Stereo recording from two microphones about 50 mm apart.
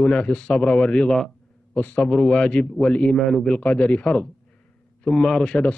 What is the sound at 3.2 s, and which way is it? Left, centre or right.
Speech, centre.